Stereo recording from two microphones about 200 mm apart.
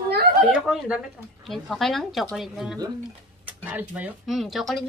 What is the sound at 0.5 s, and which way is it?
Speech, 5° right (ahead or behind).